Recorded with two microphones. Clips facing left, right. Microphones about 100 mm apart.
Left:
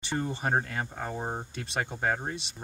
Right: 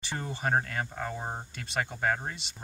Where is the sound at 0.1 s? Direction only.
25° left (ahead or behind).